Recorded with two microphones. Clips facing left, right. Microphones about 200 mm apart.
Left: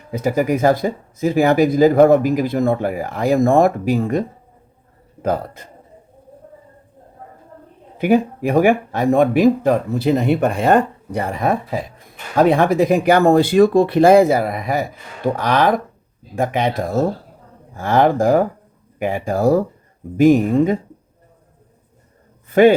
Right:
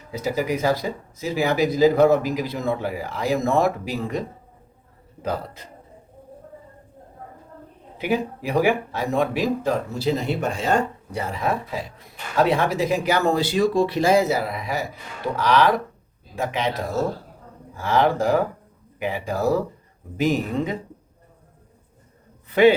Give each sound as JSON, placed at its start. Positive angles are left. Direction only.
{"t": 0.1, "sound": "speech", "side_deg": 55}
{"t": 5.2, "sound": "speech", "side_deg": 50}
{"t": 7.9, "sound": "speech", "side_deg": 50}
{"t": 22.4, "sound": "a sound", "side_deg": 45}